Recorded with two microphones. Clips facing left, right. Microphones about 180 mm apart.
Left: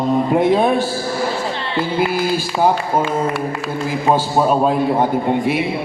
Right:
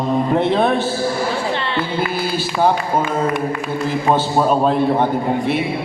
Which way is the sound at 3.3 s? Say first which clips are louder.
Right 1 dB; 15° right (ahead or behind).